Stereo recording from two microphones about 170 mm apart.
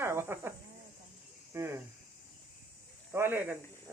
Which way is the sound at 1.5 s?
15° right (ahead or behind).